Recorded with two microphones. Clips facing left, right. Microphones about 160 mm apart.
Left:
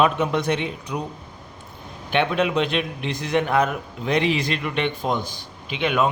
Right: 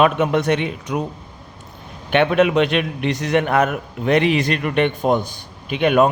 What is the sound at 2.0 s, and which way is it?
A man's voice, 65° right (ahead or behind).